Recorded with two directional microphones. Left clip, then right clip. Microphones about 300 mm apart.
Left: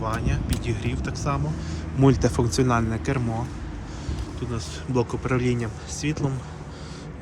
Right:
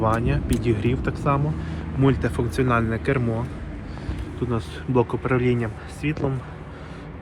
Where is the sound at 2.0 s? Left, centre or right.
Centre.